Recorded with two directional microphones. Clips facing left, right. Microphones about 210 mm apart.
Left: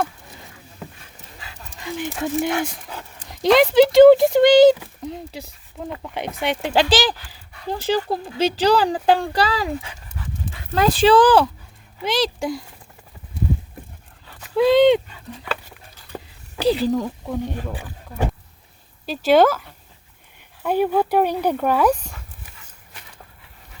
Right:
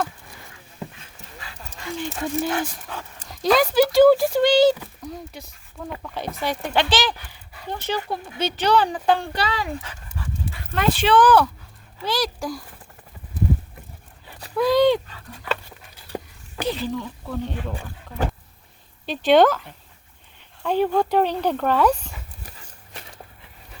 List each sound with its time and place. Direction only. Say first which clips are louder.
1.7 s speech: left 2 dB; 15° left (ahead or behind)
6.9 s speech: left 4 dB; 35° left (ahead or behind)
10.8 s speech: left 4 dB; 35° left (ahead or behind)
14.5 s speech: left 4 dB; 25° left (ahead or behind)
16.6 s speech: left 7 dB; 35° left (ahead or behind)
17.2 s speech: left 2 dB; 15° left (ahead or behind)